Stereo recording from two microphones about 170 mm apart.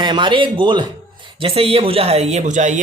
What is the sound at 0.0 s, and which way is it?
A man's voice, 25° right (ahead or behind).